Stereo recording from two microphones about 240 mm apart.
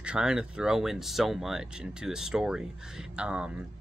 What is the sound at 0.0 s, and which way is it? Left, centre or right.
Speech, centre.